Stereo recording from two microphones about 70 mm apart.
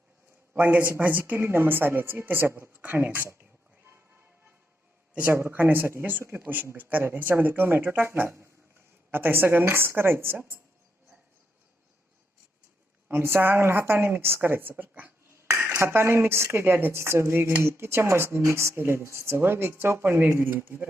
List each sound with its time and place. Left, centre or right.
0.5 s a woman's voice: right
5.1 s a woman's voice: centre; by 10.6 s right
13.1 s speech: right
15.4 s speech: right